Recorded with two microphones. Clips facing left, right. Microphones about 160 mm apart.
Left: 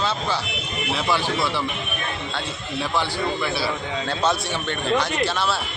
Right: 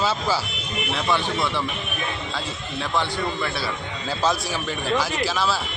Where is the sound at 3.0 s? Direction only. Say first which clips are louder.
Even; 5° left (ahead or behind).